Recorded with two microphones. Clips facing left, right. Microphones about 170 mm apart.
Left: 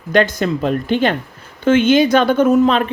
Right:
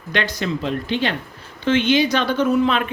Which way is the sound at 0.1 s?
45° left (ahead or behind).